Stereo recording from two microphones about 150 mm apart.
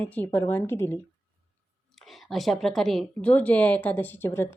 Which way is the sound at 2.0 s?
Centre (ahead or behind).